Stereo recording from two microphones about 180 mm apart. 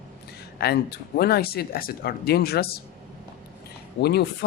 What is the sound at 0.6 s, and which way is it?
Speech, 60° left (ahead or behind).